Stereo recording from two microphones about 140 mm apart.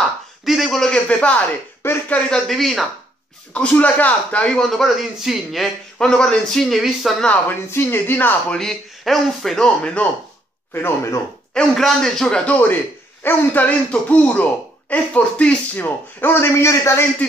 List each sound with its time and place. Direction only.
0.5 s a man's voice: centre (ahead or behind)
7.2 s speech: 15° left (ahead or behind)
11.5 s a man's voice: 5° left (ahead or behind); by 17.0 s 20° left (ahead or behind)